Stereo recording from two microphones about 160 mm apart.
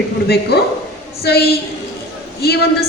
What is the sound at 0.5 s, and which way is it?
A woman's voice, 85° left.